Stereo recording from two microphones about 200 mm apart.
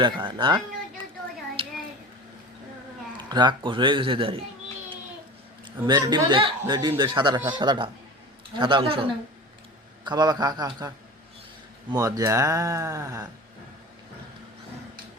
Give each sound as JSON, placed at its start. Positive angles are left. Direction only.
{"t": 0.0, "sound": "speech", "side_deg": -25}
{"t": 3.2, "sound": "speech", "side_deg": -20}
{"t": 5.6, "sound": "speech", "side_deg": -20}